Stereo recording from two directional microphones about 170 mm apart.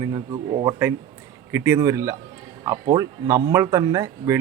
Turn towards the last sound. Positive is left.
turn(degrees=-20)  # may be behind; listen again after turning